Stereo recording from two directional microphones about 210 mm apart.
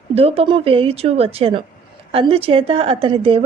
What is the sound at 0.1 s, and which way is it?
A woman's voice, 30° right (ahead or behind).